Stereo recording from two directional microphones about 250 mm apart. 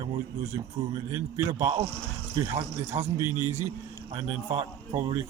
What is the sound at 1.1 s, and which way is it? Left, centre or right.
Speech, centre.